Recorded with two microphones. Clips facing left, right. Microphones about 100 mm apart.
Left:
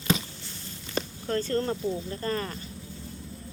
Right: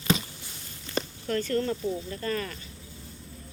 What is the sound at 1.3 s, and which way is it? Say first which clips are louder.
Speech: even; 30° left (ahead or behind).